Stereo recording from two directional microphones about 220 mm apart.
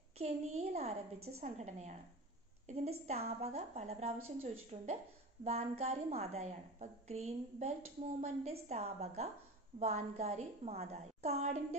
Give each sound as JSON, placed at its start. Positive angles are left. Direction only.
{"t": 0.2, "sound": "a woman's voice", "side_deg": -30}